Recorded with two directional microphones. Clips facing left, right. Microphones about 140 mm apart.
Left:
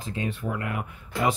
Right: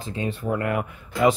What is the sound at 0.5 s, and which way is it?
Speech, 70° right (ahead or behind).